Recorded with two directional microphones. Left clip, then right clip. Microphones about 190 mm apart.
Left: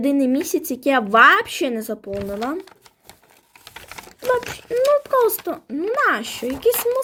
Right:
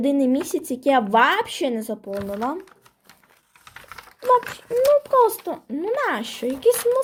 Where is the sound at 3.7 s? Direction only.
45° left (ahead or behind).